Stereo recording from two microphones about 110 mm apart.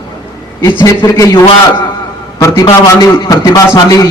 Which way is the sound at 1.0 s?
30° left (ahead or behind).